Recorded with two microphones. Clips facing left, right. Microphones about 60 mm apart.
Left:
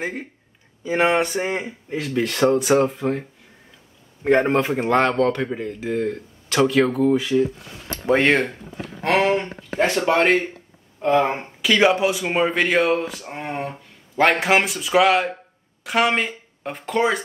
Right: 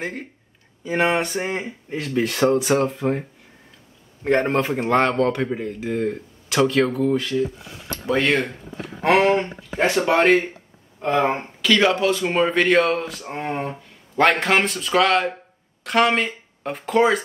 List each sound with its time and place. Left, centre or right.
0.0 s speech: centre
4.2 s speech: centre
8.1 s speech: left
8.8 s speech: centre
9.4 s speech: centre
11.3 s speech: centre